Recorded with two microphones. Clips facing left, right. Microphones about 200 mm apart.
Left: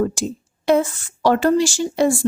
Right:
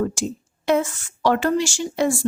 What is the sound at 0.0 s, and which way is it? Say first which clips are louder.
A woman's voice: left 3 dB; 35° left (ahead or behind).